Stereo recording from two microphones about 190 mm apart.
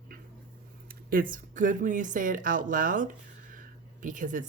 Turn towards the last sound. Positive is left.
turn(degrees=-45)  # may be behind; listen again after turning